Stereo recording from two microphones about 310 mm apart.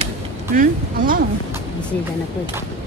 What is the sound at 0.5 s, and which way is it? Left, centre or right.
Speech, right.